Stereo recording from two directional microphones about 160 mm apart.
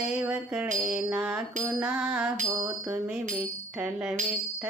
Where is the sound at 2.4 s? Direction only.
20° right (ahead or behind).